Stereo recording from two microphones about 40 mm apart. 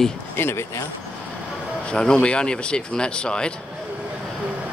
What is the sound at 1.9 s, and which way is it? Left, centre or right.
Speech, left.